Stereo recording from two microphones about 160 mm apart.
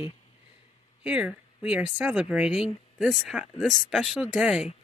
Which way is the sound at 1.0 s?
10° right (ahead or behind).